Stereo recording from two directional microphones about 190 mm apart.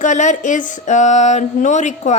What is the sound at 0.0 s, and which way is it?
A woman's voice, 40° left (ahead or behind).